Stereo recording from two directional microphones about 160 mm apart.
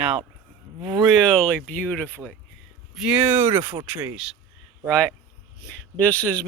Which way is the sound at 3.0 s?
5° right (ahead or behind).